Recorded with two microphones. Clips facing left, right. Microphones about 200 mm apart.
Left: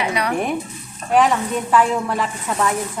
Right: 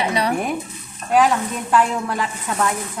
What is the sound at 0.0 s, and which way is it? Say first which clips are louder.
Stir: right 1 dB; 30° right (ahead or behind).